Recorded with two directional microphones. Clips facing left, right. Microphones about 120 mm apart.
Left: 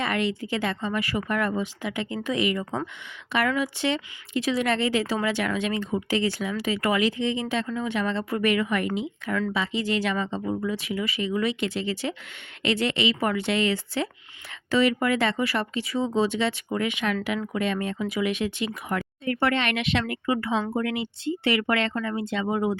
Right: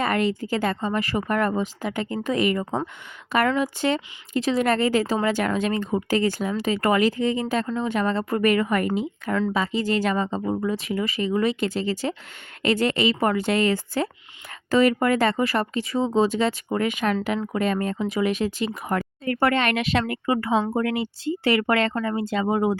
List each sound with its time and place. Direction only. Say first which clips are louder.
0.0 s a woman's voice: right 3 dB; 40° right (ahead or behind)